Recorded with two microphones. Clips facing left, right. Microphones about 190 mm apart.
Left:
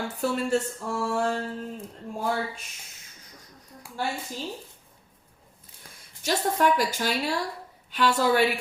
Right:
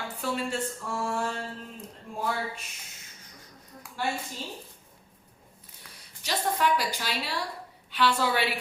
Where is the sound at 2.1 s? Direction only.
40° left (ahead or behind).